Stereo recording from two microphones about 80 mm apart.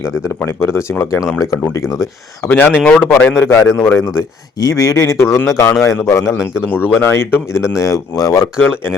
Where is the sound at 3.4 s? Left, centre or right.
Left.